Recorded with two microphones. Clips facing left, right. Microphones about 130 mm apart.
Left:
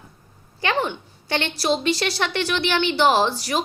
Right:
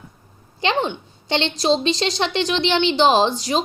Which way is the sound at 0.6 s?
20° right (ahead or behind).